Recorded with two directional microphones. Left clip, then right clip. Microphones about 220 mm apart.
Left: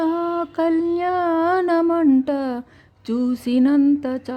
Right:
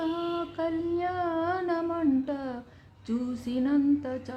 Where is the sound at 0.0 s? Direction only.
45° left (ahead or behind).